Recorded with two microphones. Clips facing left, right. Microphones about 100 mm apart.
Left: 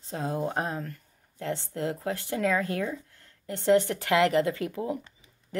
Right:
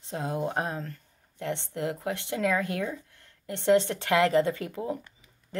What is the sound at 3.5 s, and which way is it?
Speech, 25° right (ahead or behind).